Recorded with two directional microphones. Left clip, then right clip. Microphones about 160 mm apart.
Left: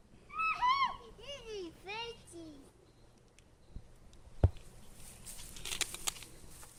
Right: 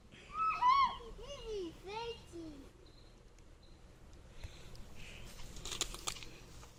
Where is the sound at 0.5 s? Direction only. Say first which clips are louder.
Right 2 dB; 35° left (ahead or behind).